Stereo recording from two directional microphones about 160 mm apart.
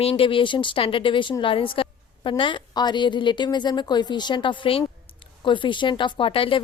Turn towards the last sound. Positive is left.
turn(degrees=35)  # may be behind; listen again after turning